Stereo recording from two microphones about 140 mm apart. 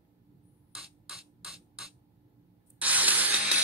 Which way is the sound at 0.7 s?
5° right (ahead or behind).